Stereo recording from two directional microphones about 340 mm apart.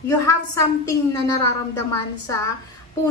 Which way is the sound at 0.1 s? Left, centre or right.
Centre.